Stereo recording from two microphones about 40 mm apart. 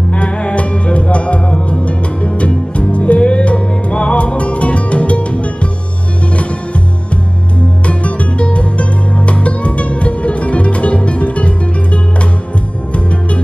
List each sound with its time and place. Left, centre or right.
0.1 s music: left
7.8 s music: left